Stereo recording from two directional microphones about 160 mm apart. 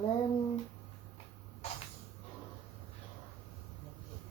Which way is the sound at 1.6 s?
45° left (ahead or behind).